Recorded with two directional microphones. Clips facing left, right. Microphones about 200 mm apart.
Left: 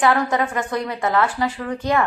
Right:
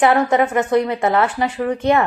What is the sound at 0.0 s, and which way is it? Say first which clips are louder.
A woman's voice: right 4 dB; 20° right (ahead or behind).